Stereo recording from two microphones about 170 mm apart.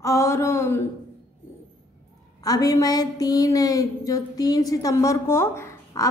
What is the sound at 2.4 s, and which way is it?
A woman's voice, 20° left (ahead or behind).